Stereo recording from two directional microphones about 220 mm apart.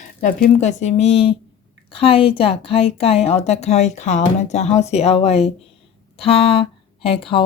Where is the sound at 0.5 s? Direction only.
35° left (ahead or behind).